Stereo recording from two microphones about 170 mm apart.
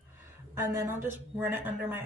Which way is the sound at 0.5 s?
15° right (ahead or behind).